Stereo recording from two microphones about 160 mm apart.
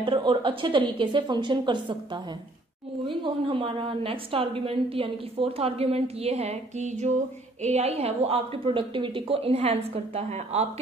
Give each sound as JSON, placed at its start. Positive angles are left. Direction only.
{"t": 0.0, "sound": "a woman's voice", "side_deg": -30}
{"t": 3.3, "sound": "a woman's voice", "side_deg": -35}